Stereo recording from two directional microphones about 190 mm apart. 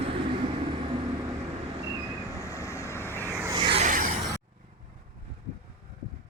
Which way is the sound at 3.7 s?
40° right (ahead or behind).